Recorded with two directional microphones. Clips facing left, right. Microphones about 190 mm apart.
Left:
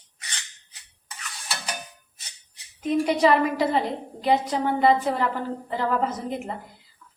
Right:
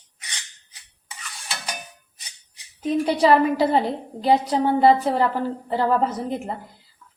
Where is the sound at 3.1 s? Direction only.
35° right (ahead or behind).